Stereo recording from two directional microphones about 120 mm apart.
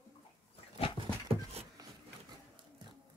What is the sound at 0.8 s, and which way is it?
Dog, 60° left (ahead or behind).